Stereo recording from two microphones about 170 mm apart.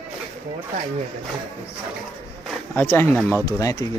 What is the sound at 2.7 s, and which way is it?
Speech, 15° left (ahead or behind).